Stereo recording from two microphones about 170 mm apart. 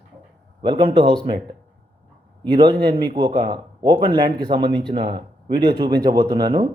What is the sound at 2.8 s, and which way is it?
Speech, 30° right (ahead or behind).